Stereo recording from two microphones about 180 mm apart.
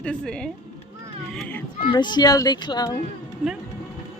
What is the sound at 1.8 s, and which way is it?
A child's voice, 25° left (ahead or behind).